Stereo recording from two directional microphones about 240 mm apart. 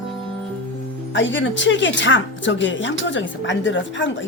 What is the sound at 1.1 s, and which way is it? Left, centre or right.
Speech, left.